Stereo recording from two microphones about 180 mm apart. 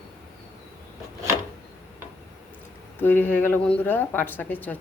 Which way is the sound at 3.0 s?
10° left (ahead or behind).